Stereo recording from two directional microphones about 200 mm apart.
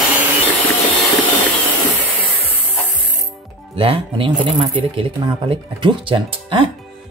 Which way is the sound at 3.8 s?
25° right (ahead or behind).